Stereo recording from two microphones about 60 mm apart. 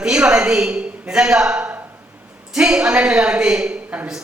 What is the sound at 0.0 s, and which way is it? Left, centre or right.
A man's voice, centre.